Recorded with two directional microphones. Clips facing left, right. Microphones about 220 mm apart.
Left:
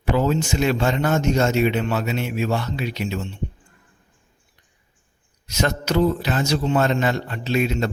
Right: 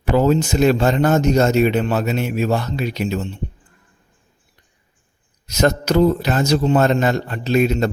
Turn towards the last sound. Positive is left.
turn(degrees=-40)  # may be behind; listen again after turning